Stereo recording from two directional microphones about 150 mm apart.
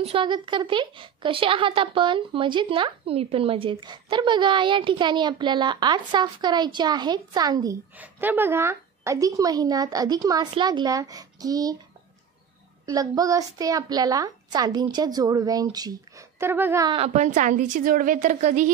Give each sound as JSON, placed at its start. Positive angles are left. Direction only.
{"t": 0.0, "sound": "a woman's voice", "side_deg": -35}
{"t": 8.0, "sound": "a woman's voice", "side_deg": -10}
{"t": 12.8, "sound": "a woman's voice", "side_deg": -25}
{"t": 16.9, "sound": "a woman's voice", "side_deg": -45}